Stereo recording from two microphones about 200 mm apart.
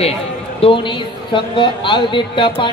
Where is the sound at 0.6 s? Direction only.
25° left (ahead or behind).